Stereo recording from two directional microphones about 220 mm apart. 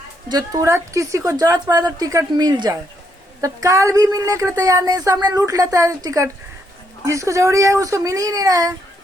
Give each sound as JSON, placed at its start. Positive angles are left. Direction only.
{"t": 0.3, "sound": "speech", "side_deg": -15}